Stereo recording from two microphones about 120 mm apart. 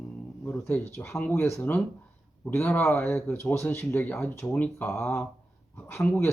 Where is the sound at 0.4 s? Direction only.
20° left (ahead or behind).